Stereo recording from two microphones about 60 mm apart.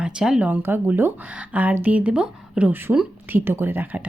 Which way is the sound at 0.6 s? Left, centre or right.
Right.